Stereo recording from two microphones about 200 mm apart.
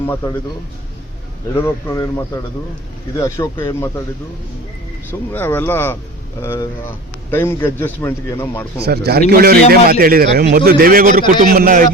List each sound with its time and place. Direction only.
1.5 s a man's voice: 15° left (ahead or behind)
5.3 s a man's voice: 10° left (ahead or behind)
8.8 s a man's voice: 50° right (ahead or behind)